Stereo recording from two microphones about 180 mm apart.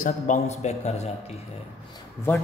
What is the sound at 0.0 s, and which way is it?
A man's voice, 40° left (ahead or behind).